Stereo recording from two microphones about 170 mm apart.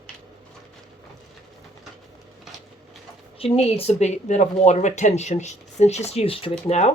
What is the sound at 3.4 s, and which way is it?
Speech, 35° left (ahead or behind).